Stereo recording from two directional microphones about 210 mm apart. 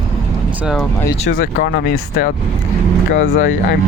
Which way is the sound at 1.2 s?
40° left (ahead or behind).